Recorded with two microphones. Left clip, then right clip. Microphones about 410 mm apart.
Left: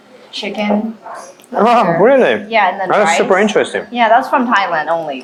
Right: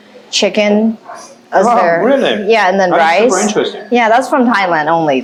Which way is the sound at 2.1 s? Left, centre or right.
Left.